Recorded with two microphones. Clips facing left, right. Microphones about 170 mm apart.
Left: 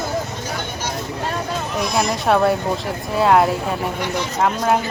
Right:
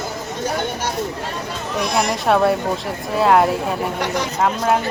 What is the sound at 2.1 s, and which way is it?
Speech, centre (ahead or behind).